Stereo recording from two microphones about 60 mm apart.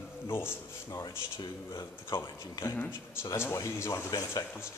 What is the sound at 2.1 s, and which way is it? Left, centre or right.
Speech, left.